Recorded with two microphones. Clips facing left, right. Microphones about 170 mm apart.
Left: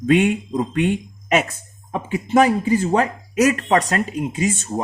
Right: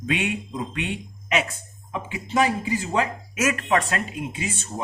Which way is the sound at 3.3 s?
35° left (ahead or behind).